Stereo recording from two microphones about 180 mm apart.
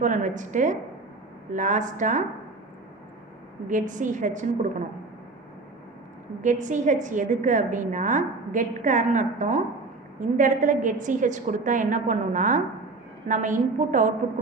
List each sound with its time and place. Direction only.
0.0 s a woman's voice: 45° right (ahead or behind)
3.7 s a woman's voice: 45° right (ahead or behind)
6.4 s a woman's voice: 45° right (ahead or behind)